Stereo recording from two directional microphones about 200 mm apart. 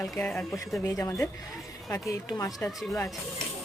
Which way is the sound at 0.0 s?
5° left (ahead or behind).